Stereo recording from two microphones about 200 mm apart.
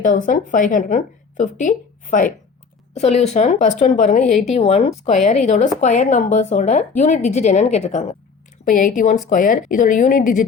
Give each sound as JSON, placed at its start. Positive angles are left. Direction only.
{"t": 0.3, "sound": "a woman's voice", "side_deg": 40}